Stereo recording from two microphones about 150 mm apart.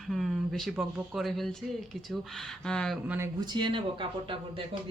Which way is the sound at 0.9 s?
Centre (ahead or behind).